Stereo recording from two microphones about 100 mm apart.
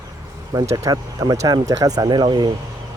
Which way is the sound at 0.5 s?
35° right (ahead or behind).